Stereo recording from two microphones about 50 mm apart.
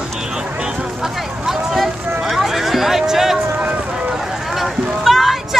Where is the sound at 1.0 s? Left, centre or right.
Centre.